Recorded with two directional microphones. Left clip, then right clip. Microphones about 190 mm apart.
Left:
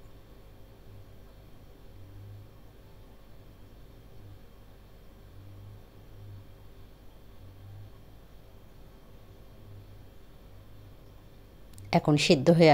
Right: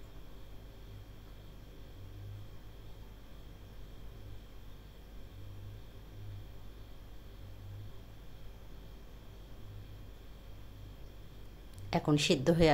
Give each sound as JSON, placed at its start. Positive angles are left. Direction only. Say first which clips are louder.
{"t": 11.9, "sound": "speech", "louder": "left 7 dB", "side_deg": 25}